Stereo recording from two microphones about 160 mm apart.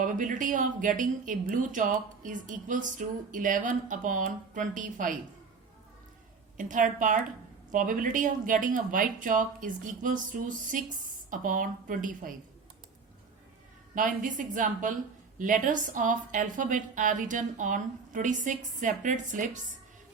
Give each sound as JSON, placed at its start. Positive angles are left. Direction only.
{"t": 0.0, "sound": "a woman's voice", "side_deg": -55}
{"t": 6.6, "sound": "a woman's voice", "side_deg": -55}
{"t": 13.9, "sound": "a woman's voice", "side_deg": -55}